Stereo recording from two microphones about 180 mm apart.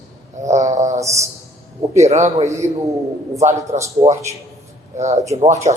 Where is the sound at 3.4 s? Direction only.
40° right (ahead or behind).